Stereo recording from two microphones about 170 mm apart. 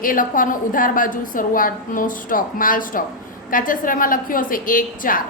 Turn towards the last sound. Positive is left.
turn(degrees=55)  # may be behind; listen again after turning